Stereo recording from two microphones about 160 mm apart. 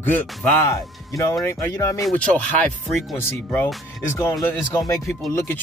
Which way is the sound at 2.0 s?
5° left (ahead or behind).